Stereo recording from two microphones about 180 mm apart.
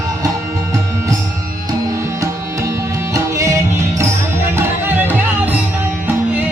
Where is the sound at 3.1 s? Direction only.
15° right (ahead or behind).